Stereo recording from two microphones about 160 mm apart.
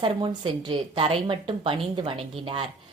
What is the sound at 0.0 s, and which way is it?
A woman's voice, 30° right (ahead or behind).